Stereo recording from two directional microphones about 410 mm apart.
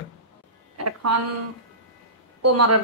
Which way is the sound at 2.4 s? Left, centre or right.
Right.